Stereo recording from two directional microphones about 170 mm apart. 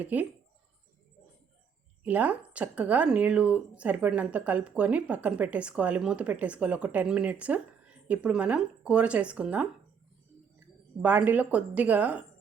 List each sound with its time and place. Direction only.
0.0 s speech: 10° right (ahead or behind)
2.0 s speech: 10° right (ahead or behind)
11.0 s speech: 10° right (ahead or behind)